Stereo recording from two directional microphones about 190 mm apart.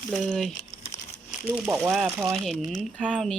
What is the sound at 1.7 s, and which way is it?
Speech, 5° right (ahead or behind).